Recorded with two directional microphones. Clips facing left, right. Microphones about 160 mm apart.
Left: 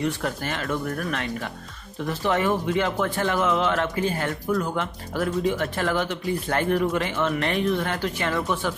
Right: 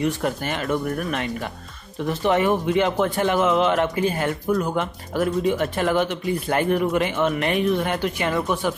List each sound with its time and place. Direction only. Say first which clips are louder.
0.0 s speech: right 3 dB; 20° right (ahead or behind)